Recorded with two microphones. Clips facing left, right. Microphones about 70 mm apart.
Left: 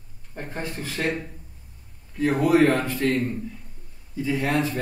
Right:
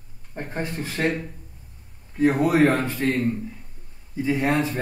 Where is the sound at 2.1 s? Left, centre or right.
Right.